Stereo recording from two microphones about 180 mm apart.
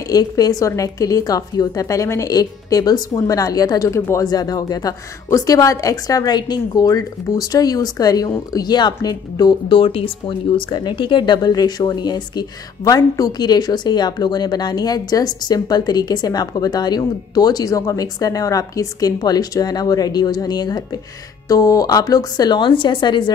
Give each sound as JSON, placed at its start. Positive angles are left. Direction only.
{"t": 0.1, "sound": "a woman's voice", "side_deg": 20}